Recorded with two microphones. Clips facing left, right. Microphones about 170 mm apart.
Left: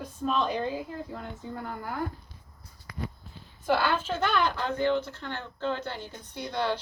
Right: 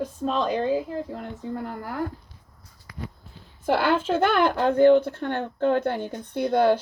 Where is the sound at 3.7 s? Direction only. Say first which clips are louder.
Right 5 dB; 55° right (ahead or behind).